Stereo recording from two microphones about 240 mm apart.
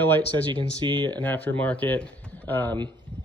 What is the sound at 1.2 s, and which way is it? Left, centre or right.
Speech, centre.